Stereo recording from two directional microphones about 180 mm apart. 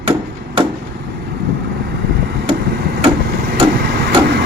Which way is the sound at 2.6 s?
65° right (ahead or behind).